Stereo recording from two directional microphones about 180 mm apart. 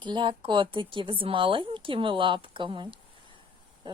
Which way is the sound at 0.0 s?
25° right (ahead or behind).